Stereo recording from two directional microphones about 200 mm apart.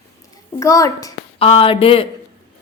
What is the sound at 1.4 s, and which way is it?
Speech, 25° left (ahead or behind).